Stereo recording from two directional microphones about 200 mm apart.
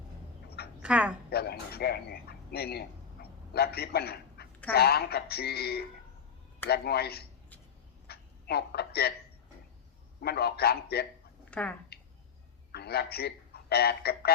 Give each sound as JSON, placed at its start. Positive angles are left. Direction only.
{"t": 0.8, "sound": "speech", "side_deg": -5}
{"t": 1.3, "sound": "a man's voice", "side_deg": 50}
{"t": 8.0, "sound": "a sound", "side_deg": 55}
{"t": 10.2, "sound": "speech", "side_deg": 50}
{"t": 11.5, "sound": "speech", "side_deg": 5}
{"t": 12.7, "sound": "a man's voice", "side_deg": 50}